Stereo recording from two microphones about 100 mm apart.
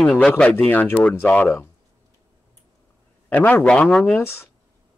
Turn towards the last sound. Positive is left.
turn(degrees=5)  # may be behind; listen again after turning